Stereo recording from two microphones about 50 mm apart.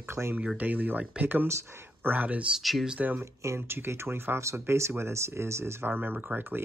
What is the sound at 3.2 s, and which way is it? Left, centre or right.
Speech, right.